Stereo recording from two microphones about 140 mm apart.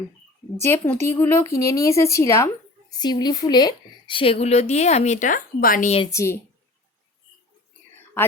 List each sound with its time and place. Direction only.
0.6 s a woman's voice: 15° left (ahead or behind); by 5.9 s 85° left
6.1 s a woman's voice: 20° left (ahead or behind)